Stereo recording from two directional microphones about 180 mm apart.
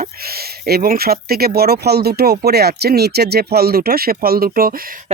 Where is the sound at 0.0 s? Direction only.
60° right (ahead or behind).